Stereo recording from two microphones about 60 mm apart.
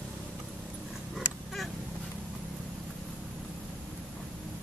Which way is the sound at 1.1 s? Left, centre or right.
Centre.